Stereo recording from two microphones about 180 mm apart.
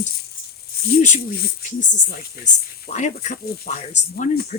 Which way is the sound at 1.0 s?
45° left (ahead or behind).